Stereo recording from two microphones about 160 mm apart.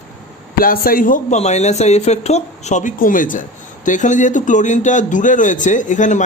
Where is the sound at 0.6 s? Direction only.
65° left (ahead or behind).